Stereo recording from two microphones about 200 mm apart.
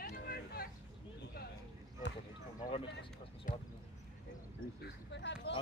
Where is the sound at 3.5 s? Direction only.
45° left (ahead or behind).